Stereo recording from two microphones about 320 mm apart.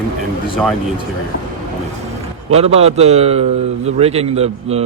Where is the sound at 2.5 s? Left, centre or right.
Centre.